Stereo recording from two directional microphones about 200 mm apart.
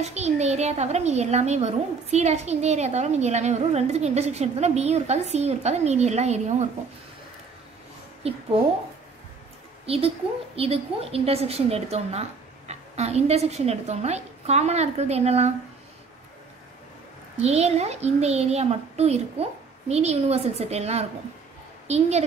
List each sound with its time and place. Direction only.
0.0 s a child's voice: 35° right (ahead or behind)
8.2 s a woman's voice: 30° right (ahead or behind)
9.8 s a child's voice: 30° right (ahead or behind)
17.4 s a child's voice: 30° right (ahead or behind)